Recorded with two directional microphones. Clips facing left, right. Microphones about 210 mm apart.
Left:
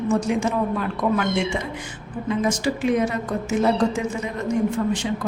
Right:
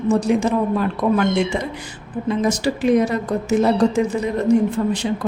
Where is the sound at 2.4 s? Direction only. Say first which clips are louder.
Right 2 dB; 35° right (ahead or behind).